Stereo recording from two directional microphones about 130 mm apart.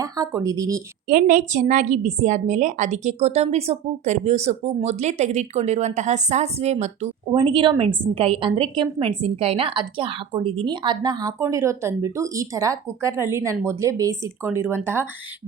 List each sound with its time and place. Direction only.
0.0 s speech: 25° right (ahead or behind)
1.0 s a woman's voice: 90° right; by 7.1 s 60° right (ahead or behind)
7.3 s a woman's voice: 45° right (ahead or behind); by 15.0 s 20° right (ahead or behind)